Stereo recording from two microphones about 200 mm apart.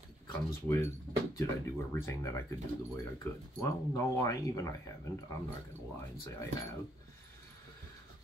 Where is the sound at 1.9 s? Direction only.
15° left (ahead or behind).